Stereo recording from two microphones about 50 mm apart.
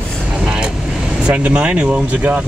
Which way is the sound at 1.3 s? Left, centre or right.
Right.